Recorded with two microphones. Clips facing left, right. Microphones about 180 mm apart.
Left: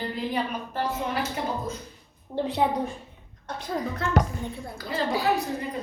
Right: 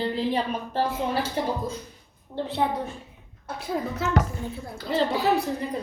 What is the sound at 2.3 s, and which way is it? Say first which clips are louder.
Speech: left 2 dB; 15° left (ahead or behind).